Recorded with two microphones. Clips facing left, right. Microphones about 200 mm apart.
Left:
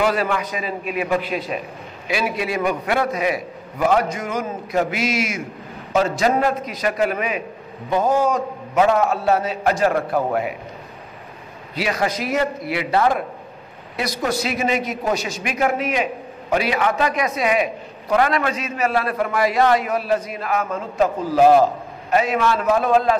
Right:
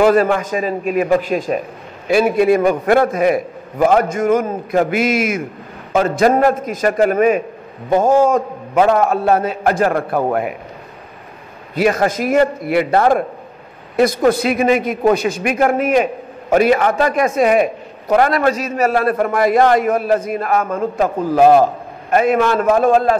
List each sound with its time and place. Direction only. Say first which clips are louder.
0.0 s a man's voice: right 8 dB; 45° right (ahead or behind)
11.7 s a man's voice: right 7 dB; 50° right (ahead or behind)